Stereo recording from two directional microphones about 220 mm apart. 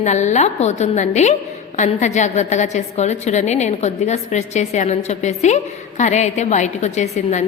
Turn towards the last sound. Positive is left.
turn(degrees=30)  # may be behind; listen again after turning